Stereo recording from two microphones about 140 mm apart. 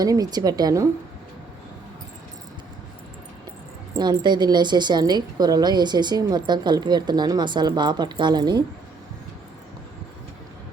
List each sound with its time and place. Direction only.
0.0 s a woman's voice: 30° right (ahead or behind)
3.9 s a woman's voice: 30° right (ahead or behind)